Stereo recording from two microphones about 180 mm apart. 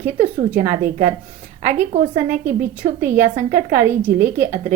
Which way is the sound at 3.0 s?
45° right (ahead or behind).